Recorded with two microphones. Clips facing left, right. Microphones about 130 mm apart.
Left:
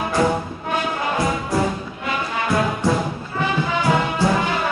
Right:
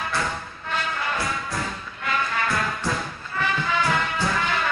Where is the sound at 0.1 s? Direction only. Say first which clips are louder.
Left 9 dB; 45° left (ahead or behind).